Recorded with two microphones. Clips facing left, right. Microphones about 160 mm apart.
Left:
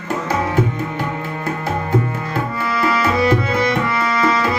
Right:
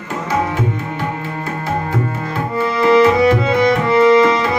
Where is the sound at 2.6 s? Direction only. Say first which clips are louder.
Right 9 dB; 20° right (ahead or behind).